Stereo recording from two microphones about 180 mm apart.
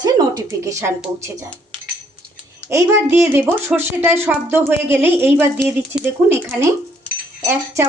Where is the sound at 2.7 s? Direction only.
15° right (ahead or behind).